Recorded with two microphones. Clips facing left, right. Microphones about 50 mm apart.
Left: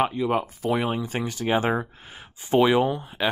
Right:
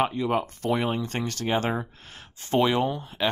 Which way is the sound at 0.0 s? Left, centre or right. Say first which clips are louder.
Left 1 dB; centre.